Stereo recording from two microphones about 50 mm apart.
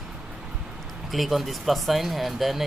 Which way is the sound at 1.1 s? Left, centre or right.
Centre.